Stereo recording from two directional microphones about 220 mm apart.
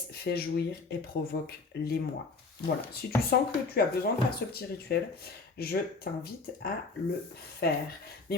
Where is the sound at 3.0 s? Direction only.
45° left (ahead or behind).